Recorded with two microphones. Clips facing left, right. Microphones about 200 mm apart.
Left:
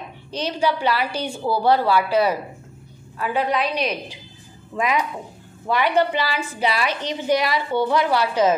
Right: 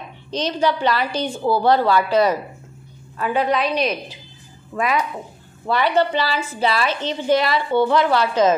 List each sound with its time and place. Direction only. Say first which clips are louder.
0.3 s a woman's voice: right 2 dB; 10° left (ahead or behind)